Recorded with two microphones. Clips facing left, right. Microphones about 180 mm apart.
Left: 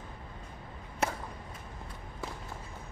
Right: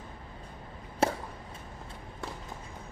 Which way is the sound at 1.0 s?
30° right (ahead or behind).